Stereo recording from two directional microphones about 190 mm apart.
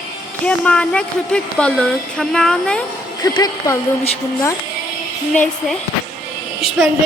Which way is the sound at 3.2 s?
20° left (ahead or behind).